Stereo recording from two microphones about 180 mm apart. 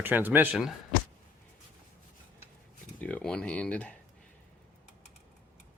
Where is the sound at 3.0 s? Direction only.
10° left (ahead or behind).